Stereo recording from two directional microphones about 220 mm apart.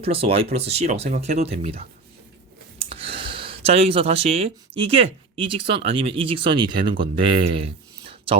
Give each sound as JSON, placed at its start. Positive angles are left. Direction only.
{"t": 0.0, "sound": "speech", "side_deg": -25}
{"t": 2.7, "sound": "a sound", "side_deg": -25}
{"t": 5.6, "sound": "speech", "side_deg": -25}